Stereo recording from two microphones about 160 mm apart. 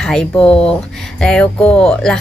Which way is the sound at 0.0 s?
5° left (ahead or behind).